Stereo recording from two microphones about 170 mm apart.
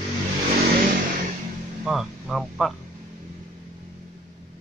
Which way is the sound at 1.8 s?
Centre (ahead or behind).